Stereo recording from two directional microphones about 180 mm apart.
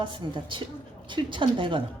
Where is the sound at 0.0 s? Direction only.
25° right (ahead or behind).